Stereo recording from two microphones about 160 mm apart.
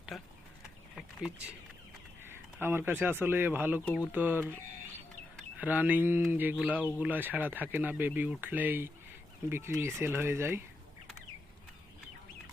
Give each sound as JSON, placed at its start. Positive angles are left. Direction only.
{"t": 0.1, "sound": "a sound", "side_deg": 0}
{"t": 2.2, "sound": "speech", "side_deg": -15}
{"t": 5.5, "sound": "speech", "side_deg": -10}